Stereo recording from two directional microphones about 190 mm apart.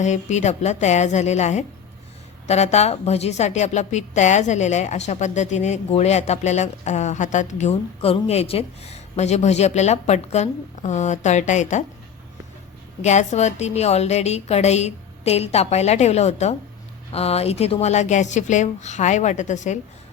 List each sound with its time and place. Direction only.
0.0 s a woman's voice: 40° left (ahead or behind)
13.0 s a woman's voice: 35° left (ahead or behind)